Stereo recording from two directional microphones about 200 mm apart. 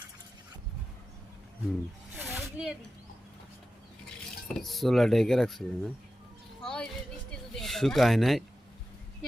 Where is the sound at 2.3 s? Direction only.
5° right (ahead or behind).